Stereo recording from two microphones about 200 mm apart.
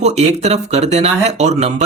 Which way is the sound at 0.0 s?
35° right (ahead or behind).